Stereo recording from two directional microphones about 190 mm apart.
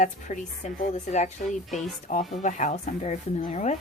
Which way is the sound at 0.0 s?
40° left (ahead or behind).